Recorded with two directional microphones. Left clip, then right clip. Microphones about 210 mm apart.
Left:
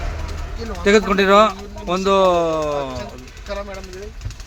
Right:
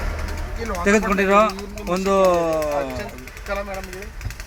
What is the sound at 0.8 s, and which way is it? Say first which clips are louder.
Speech: left 4 dB; 15° left (ahead or behind).